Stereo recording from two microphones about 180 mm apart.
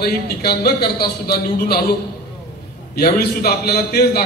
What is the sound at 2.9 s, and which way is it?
Speech, 60° left (ahead or behind).